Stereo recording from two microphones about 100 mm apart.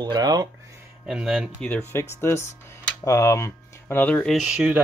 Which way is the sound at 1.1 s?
10° right (ahead or behind).